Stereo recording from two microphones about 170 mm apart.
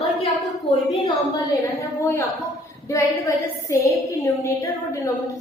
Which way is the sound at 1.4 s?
20° left (ahead or behind).